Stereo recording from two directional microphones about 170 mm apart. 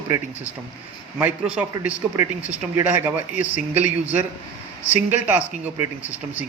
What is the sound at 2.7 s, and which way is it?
A man's voice, 10° right (ahead or behind).